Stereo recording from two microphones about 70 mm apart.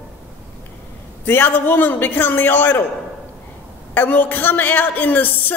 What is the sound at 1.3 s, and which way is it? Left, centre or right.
A woman's voice, left.